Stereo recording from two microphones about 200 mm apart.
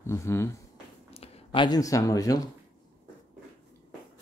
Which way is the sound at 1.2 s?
25° left (ahead or behind).